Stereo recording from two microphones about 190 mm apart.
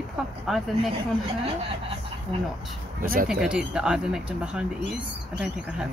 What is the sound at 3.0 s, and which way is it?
Speech, 45° right (ahead or behind).